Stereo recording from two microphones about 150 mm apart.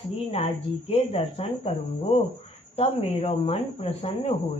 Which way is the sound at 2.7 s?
40° left (ahead or behind).